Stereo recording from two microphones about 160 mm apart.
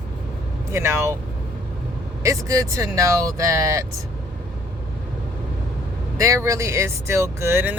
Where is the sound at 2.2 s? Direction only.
20° right (ahead or behind).